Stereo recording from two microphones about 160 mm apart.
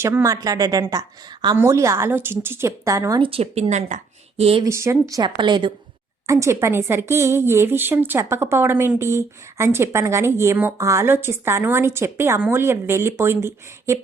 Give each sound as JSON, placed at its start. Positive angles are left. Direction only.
{"t": 0.0, "sound": "a woman's voice", "side_deg": -15}
{"t": 3.2, "sound": "speech", "side_deg": -35}
{"t": 4.6, "sound": "a woman's voice", "side_deg": -20}
{"t": 5.1, "sound": "a woman's voice", "side_deg": -30}